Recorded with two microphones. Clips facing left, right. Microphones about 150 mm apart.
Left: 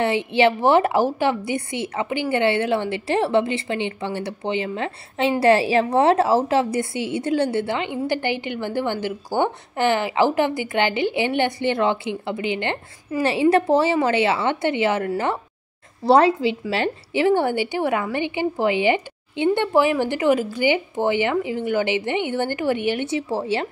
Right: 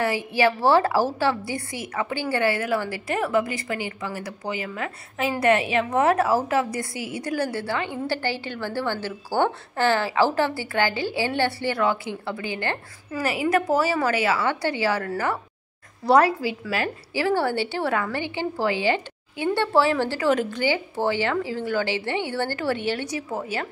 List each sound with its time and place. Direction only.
0.0 s a woman's voice: 25° left (ahead or behind)
20.3 s a woman's voice: 5° left (ahead or behind)
20.6 s a woman's voice: 20° left (ahead or behind)